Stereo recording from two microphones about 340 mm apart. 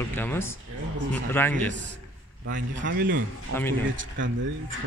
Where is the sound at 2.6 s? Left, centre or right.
Right.